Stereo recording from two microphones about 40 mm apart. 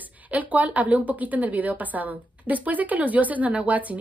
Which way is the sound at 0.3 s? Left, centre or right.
Right.